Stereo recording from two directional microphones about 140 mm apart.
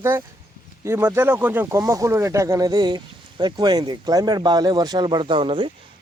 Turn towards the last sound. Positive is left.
turn(degrees=-35)  # may be behind; listen again after turning